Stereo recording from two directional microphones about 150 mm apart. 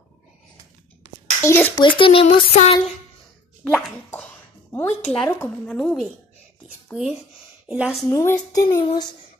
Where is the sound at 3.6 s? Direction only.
10° left (ahead or behind).